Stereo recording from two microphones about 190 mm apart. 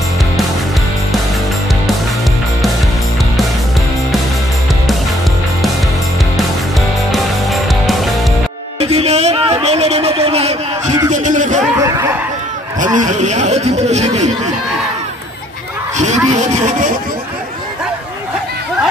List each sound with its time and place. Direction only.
7.1 s music: centre (ahead or behind)
8.7 s music: 30° right (ahead or behind)
11.2 s a sound: 40° right (ahead or behind)
11.8 s snicker: 15° right (ahead or behind)
12.8 s speech: 40° right (ahead or behind)
16.0 s a sound: 40° right (ahead or behind)